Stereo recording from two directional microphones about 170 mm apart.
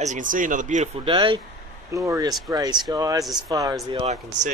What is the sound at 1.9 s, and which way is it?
Speech, 20° right (ahead or behind).